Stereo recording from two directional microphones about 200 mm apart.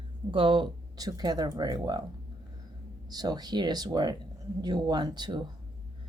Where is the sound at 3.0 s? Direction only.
20° right (ahead or behind).